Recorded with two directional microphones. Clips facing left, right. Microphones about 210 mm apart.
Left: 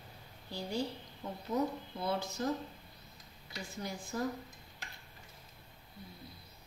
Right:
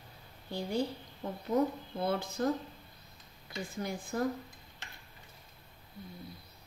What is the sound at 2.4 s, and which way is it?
Speech, 55° right (ahead or behind).